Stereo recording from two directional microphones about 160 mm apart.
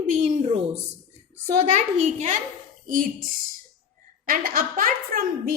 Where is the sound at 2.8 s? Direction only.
60° right (ahead or behind).